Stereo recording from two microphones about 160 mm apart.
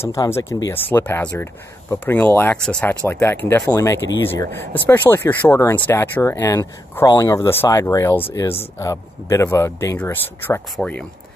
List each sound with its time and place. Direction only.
0.0 s speech: 15° left (ahead or behind)